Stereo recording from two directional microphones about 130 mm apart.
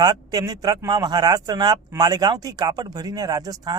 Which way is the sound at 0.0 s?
30° right (ahead or behind).